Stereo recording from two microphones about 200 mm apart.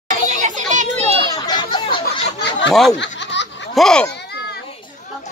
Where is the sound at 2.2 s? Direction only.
60° left (ahead or behind).